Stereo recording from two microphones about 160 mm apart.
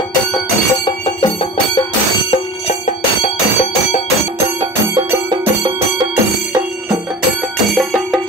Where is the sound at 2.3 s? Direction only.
45° left (ahead or behind).